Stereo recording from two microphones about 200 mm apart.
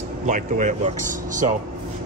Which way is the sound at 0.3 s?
35° right (ahead or behind).